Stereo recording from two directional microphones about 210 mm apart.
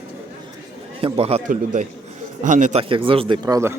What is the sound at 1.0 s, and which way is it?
A man's voice, 30° right (ahead or behind).